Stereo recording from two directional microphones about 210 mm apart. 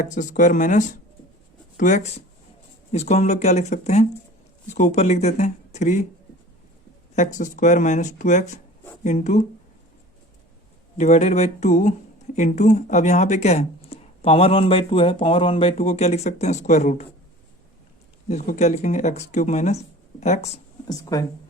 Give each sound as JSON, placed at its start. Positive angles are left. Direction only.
{"t": 0.0, "sound": "speech", "side_deg": 35}
{"t": 7.2, "sound": "speech", "side_deg": 35}
{"t": 10.9, "sound": "speech", "side_deg": 30}
{"t": 18.3, "sound": "speech", "side_deg": 35}
{"t": 20.8, "sound": "speech", "side_deg": 15}